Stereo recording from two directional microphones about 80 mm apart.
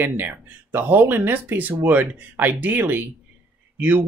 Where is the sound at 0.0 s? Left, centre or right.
Right.